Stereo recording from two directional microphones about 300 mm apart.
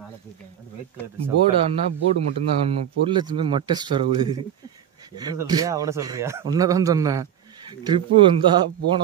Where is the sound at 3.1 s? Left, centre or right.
Centre.